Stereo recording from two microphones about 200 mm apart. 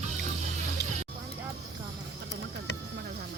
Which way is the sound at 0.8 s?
55° left (ahead or behind).